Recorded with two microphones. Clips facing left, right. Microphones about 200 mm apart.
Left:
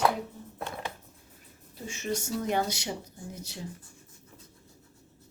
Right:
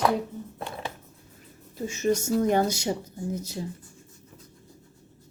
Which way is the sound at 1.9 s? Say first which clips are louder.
Right 8 dB; 40° right (ahead or behind).